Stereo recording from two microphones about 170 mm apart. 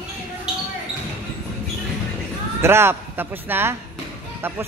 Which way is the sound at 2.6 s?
15° right (ahead or behind).